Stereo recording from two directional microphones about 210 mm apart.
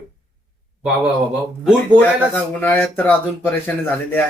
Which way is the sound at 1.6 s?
5° left (ahead or behind).